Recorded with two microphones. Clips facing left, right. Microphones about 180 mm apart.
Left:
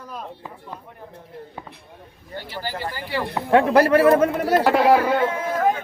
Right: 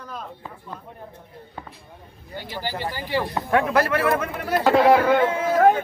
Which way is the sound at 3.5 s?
35° left (ahead or behind).